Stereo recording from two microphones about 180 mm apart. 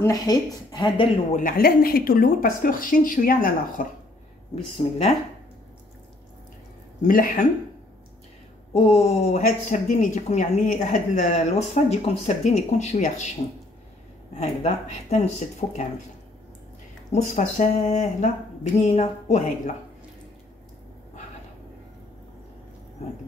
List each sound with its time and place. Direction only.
0.0 s a woman's voice: 20° left (ahead or behind)
1.3 s speech: 50° left (ahead or behind)
4.7 s speech: 35° left (ahead or behind)
7.0 s speech: 50° left (ahead or behind)
8.7 s speech: 35° left (ahead or behind)
14.4 s speech: 40° left (ahead or behind)
17.1 s speech: 40° left (ahead or behind)